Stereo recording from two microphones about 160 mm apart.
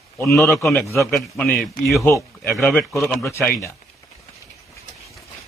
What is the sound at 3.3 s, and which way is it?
Speech, 15° left (ahead or behind).